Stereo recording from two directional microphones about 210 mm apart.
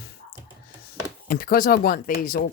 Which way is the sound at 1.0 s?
45° left (ahead or behind).